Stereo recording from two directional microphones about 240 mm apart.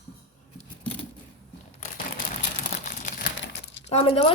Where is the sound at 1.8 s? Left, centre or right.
Left.